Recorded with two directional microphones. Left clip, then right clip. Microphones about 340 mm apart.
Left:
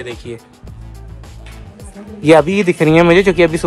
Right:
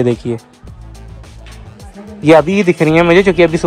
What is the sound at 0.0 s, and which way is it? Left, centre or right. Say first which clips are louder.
Speech: right 11 dB; centre.